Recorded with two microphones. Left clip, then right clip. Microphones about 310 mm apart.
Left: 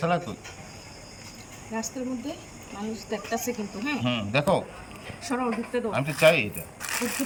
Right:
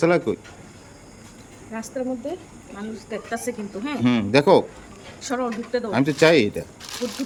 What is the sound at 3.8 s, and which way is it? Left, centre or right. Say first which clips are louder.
Speech: right 5 dB; centre.